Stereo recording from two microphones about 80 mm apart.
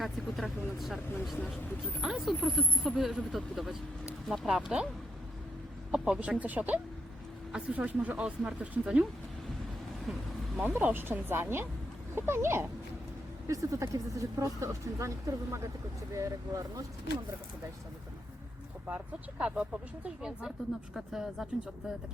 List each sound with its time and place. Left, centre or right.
0.0 s vehicle: centre
2.0 s speech: centre
5.9 s speech: centre
10.1 s speech: centre
10.6 s speech: right
13.5 s speech: right
18.9 s speech: centre